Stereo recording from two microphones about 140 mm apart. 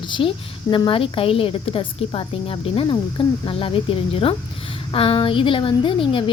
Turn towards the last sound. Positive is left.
turn(degrees=40)  # may be behind; listen again after turning